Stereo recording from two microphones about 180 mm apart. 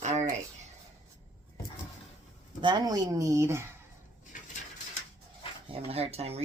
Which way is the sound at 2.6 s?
25° right (ahead or behind).